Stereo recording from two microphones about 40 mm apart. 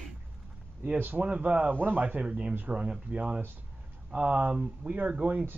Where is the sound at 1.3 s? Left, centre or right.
Right.